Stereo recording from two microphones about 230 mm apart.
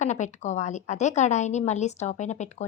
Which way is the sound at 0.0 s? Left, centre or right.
Left.